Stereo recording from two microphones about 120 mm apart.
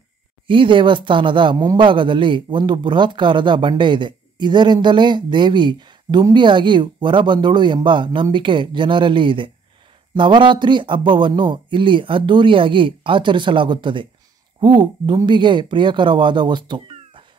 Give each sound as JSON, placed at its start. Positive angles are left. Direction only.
{"t": 0.5, "sound": "speech", "side_deg": -45}